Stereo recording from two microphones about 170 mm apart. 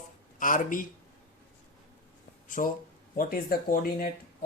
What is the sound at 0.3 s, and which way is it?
Speech, 50° left (ahead or behind).